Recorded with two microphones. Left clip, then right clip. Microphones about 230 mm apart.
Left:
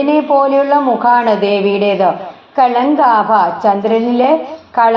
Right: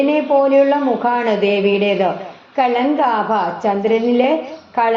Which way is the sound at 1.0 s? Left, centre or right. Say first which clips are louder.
Left 5 dB; left.